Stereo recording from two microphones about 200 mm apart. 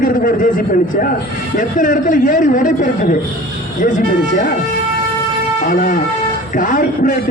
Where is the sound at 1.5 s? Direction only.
40° left (ahead or behind).